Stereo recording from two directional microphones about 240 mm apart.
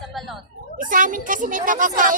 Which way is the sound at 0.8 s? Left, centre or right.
Right.